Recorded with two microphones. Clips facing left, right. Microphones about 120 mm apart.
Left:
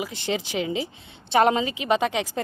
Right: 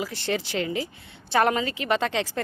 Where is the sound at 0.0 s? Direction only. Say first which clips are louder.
Even; 15° left (ahead or behind).